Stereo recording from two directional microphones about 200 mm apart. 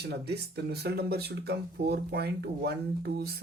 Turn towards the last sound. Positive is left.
turn(degrees=-55)  # may be behind; listen again after turning